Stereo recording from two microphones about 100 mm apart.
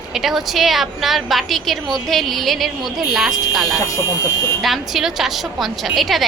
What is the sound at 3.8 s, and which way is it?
Speech, 35° left (ahead or behind).